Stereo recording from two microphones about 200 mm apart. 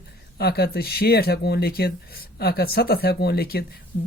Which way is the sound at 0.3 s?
55° left (ahead or behind).